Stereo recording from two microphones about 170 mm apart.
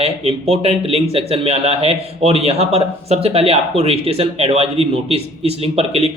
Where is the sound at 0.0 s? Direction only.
35° right (ahead or behind).